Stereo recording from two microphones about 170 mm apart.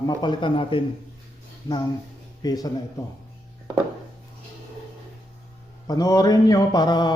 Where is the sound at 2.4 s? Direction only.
25° left (ahead or behind).